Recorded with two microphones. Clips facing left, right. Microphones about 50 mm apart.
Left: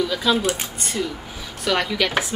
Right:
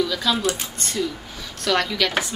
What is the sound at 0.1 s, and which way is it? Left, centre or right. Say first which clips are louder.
Speech: left 2 dB; centre.